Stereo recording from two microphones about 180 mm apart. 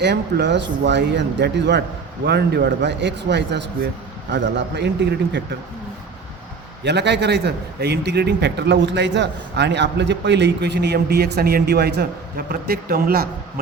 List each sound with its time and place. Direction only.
0.0 s a man's voice: 70° right (ahead or behind)
6.8 s a man's voice: 70° right (ahead or behind); by 13.2 s 55° right (ahead or behind)